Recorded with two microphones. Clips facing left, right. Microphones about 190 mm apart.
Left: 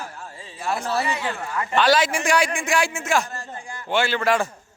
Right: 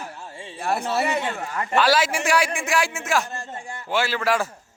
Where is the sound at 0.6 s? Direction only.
60° right (ahead or behind).